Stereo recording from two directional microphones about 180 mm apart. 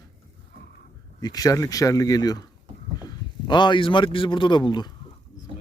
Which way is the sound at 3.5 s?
25° left (ahead or behind).